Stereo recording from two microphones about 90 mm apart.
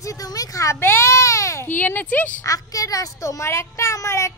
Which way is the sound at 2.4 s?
40° left (ahead or behind).